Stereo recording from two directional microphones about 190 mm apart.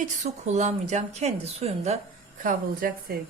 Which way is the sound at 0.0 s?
40° right (ahead or behind).